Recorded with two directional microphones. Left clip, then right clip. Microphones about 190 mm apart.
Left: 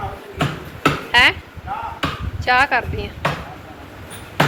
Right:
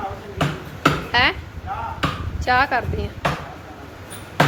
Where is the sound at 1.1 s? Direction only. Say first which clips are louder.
Left 6 dB; 15° right (ahead or behind).